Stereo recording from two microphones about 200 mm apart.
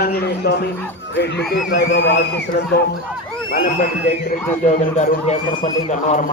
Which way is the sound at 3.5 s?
45° left (ahead or behind).